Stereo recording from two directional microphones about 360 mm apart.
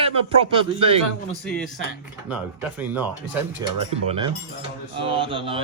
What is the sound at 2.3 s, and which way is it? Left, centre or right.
Speech, centre.